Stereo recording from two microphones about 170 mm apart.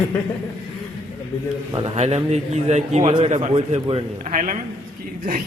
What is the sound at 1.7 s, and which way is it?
Speech, 35° right (ahead or behind).